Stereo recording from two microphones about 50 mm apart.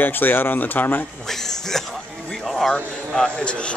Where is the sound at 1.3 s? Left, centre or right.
Centre.